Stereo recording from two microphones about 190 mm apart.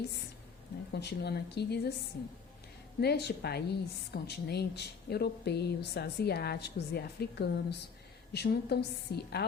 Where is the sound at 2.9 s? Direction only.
60° left (ahead or behind).